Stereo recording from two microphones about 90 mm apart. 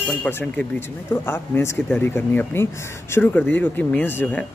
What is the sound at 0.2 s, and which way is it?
Speech, 25° left (ahead or behind).